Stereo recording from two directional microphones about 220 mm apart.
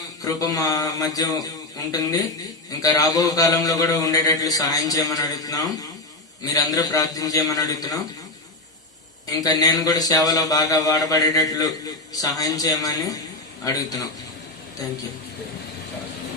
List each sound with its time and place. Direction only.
0.2 s a man's voice: 15° left (ahead or behind)
9.4 s a man's voice: 15° left (ahead or behind)